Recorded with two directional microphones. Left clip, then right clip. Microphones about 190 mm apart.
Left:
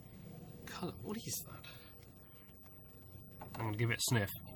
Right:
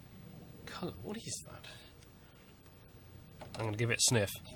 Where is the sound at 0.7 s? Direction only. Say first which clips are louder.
Right 2 dB; 35° right (ahead or behind).